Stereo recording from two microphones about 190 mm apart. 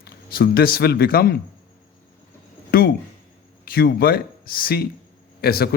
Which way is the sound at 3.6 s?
50° left (ahead or behind).